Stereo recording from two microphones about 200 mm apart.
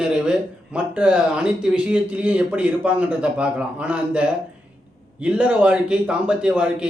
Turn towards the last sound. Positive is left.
turn(degrees=-5)  # may be behind; listen again after turning